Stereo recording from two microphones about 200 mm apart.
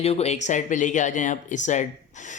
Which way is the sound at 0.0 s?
30° left (ahead or behind).